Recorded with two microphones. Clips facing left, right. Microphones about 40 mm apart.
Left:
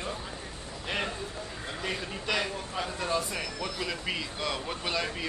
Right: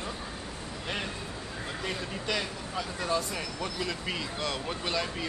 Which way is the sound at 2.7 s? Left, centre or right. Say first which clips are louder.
Even; left.